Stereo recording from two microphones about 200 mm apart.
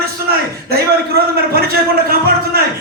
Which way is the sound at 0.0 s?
50° right (ahead or behind).